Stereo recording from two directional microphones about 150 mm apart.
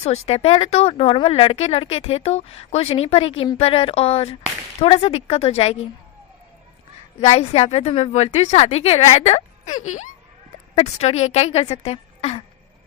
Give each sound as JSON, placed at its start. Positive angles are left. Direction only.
{"t": 0.0, "sound": "speech", "side_deg": 45}
{"t": 7.2, "sound": "a woman's voice", "side_deg": 45}